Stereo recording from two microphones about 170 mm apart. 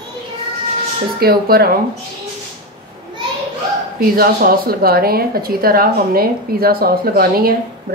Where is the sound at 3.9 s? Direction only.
60° right (ahead or behind).